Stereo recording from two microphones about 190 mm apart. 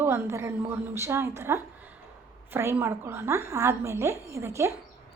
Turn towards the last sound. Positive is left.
turn(degrees=-15)  # may be behind; listen again after turning